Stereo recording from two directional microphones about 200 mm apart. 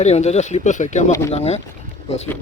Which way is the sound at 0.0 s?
35° left (ahead or behind).